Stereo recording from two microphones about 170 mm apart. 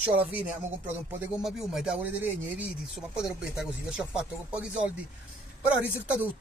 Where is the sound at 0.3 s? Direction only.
10° right (ahead or behind).